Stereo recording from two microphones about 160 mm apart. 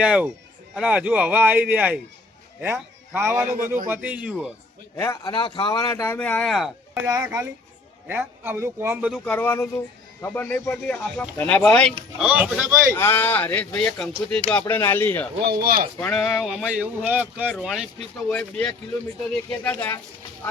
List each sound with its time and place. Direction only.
0.0 s speech: 5° right (ahead or behind)
3.2 s speech: 15° right (ahead or behind)
4.9 s speech: 15° left (ahead or behind); by 6.7 s centre (ahead or behind)
7.0 s speech: 10° right (ahead or behind)
9.2 s speech: 10° left (ahead or behind)
12.2 s speech: 10° right (ahead or behind)
12.9 s speech: 15° left (ahead or behind)
15.6 s speech: 65° right (ahead or behind)
16.0 s speech: 5° left (ahead or behind)